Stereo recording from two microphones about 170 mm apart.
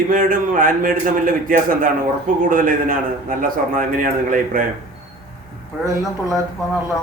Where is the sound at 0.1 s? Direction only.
55° right (ahead or behind).